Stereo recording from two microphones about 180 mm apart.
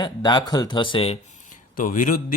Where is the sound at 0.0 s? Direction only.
25° left (ahead or behind).